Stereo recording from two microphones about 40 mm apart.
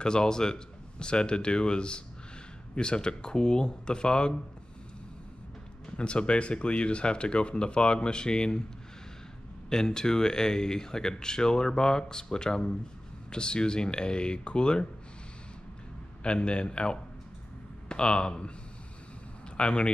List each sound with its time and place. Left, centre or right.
0.0 s speech: left
5.9 s speech: left
9.7 s speech: centre
16.2 s speech: left
19.5 s speech: left